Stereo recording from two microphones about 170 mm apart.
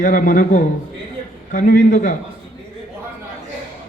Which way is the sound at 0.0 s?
50° left (ahead or behind).